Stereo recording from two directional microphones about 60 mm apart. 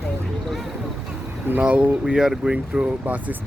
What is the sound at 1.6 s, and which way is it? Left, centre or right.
Speech, right.